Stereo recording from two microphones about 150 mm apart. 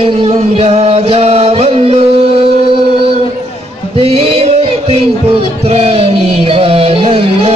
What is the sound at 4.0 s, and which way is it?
Music, 40° right (ahead or behind).